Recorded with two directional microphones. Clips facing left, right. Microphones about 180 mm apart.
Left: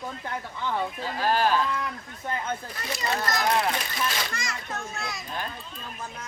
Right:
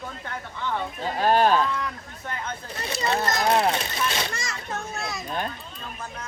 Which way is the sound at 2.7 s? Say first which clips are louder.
Right 8 dB; 25° right (ahead or behind).